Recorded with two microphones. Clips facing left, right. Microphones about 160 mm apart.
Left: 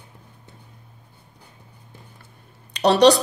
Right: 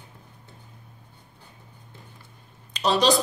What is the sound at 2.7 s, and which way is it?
Speech, 70° left (ahead or behind).